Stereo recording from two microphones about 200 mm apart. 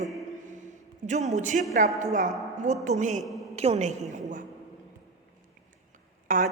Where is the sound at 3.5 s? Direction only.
30° right (ahead or behind).